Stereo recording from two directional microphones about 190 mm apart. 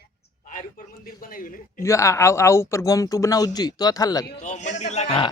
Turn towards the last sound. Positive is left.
turn(degrees=35)  # may be behind; listen again after turning